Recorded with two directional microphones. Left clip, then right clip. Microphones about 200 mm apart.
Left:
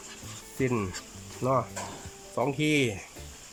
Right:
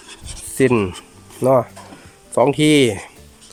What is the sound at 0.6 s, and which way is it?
Speech, 50° right (ahead or behind).